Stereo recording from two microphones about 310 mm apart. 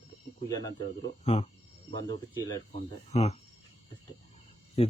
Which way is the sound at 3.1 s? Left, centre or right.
Left.